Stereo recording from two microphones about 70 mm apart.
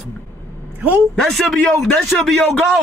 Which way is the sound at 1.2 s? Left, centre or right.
Centre.